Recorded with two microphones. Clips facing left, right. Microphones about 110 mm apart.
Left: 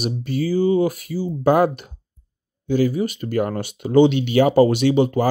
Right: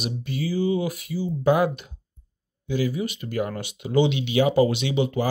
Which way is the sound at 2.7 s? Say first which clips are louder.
Left 6 dB; 40° left (ahead or behind).